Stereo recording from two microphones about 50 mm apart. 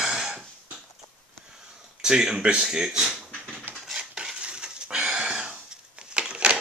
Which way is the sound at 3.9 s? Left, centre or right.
Centre.